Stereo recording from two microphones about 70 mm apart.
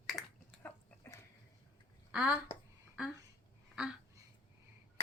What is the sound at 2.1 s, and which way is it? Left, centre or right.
Speech, centre.